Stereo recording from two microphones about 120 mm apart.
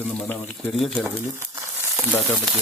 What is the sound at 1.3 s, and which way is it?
Crumpling, 20° right (ahead or behind).